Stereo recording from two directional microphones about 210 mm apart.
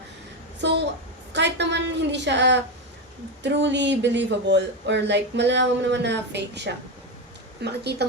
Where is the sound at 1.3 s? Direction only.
55° right (ahead or behind).